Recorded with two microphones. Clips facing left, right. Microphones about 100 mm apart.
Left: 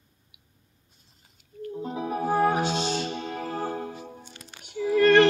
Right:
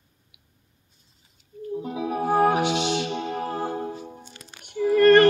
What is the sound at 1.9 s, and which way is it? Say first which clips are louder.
Music: right 2 dB; 35° left (ahead or behind).